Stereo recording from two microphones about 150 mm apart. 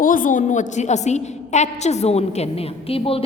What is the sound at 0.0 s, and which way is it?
A woman's voice, 65° left (ahead or behind).